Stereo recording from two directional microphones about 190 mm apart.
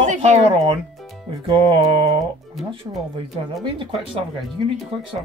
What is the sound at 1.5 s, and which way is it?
Speech, 30° right (ahead or behind).